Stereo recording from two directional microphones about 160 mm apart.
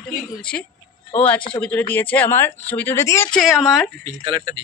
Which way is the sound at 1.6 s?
10° left (ahead or behind).